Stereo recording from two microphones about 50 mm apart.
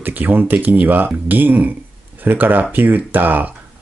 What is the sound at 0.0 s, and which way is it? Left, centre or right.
Speech, right.